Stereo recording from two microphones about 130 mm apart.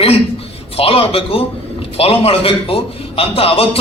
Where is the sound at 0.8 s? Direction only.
45° left (ahead or behind).